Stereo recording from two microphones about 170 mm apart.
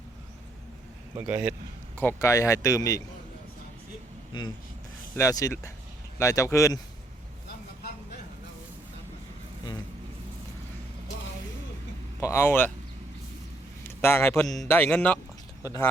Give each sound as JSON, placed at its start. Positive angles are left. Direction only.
{"t": 1.3, "sound": "a man's voice", "side_deg": -5}
{"t": 2.0, "sound": "speech", "side_deg": 15}
{"t": 5.1, "sound": "speech", "side_deg": 20}
{"t": 12.2, "sound": "speech", "side_deg": 15}
{"t": 14.0, "sound": "speech", "side_deg": 15}